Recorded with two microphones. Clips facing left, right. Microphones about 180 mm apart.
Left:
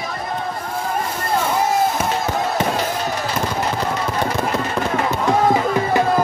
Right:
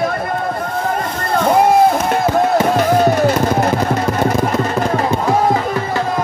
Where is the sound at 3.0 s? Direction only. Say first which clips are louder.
Right 10 dB; 55° right (ahead or behind).